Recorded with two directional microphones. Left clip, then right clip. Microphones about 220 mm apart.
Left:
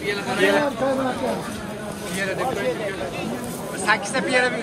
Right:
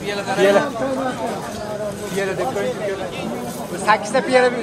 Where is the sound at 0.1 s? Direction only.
40° right (ahead or behind).